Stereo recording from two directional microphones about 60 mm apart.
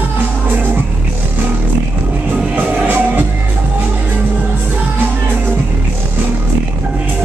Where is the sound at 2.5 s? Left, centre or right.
Right.